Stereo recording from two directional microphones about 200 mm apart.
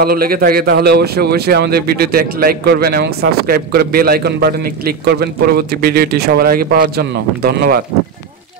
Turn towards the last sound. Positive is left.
turn(degrees=-50)  # may be behind; listen again after turning